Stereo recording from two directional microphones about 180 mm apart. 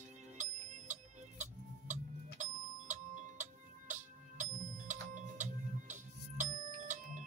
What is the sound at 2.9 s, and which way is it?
Music, 45° right (ahead or behind).